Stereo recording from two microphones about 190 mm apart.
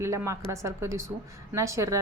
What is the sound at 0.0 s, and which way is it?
Speech, 15° right (ahead or behind).